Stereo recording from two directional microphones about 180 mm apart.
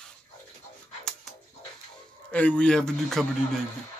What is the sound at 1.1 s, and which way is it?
Music, centre (ahead or behind).